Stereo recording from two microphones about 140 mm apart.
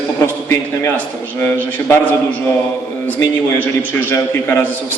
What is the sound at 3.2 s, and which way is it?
A man's voice, 15° left (ahead or behind).